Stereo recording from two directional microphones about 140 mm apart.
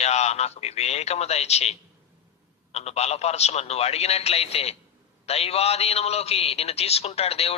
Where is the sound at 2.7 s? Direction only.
50° left (ahead or behind).